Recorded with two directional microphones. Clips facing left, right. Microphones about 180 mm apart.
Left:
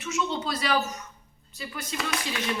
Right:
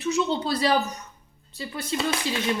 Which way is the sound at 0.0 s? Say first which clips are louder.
Right 5 dB; 30° right (ahead or behind).